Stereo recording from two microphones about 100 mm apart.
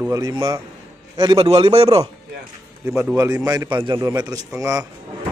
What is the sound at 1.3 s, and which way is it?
Speech, 60° right (ahead or behind).